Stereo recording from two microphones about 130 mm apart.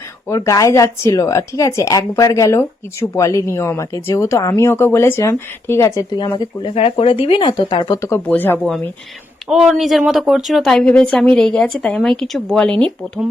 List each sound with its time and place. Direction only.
0.3 s a woman's voice: 25° left (ahead or behind)
6.0 s speech: 35° left (ahead or behind)
8.0 s speech: 15° left (ahead or behind)
8.5 s speech: 5° left (ahead or behind)